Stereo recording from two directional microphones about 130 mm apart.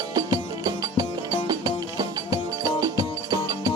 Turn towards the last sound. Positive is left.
turn(degrees=-25)  # may be behind; listen again after turning